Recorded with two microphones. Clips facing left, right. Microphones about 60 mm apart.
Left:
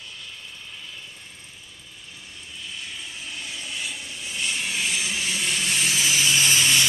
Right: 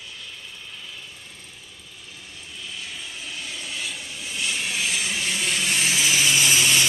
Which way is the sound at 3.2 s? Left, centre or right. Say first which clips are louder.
Right 1 dB; centre.